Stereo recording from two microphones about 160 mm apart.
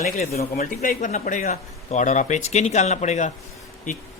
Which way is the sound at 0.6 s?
60° left (ahead or behind).